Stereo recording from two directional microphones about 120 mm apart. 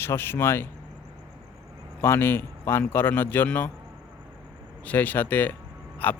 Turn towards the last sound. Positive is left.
turn(degrees=15)  # may be behind; listen again after turning